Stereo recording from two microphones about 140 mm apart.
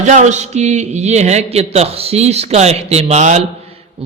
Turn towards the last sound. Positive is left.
turn(degrees=-55)  # may be behind; listen again after turning